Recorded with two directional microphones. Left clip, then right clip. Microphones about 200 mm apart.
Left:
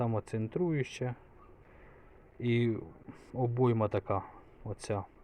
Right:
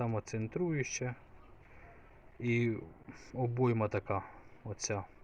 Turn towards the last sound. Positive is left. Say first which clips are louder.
# left 1 dB
turn(degrees=15)  # may be behind; listen again after turning